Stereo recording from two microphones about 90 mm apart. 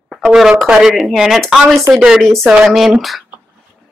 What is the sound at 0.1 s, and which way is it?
Speech, 5° right (ahead or behind).